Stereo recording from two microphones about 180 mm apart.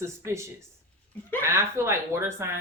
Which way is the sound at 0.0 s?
15° right (ahead or behind).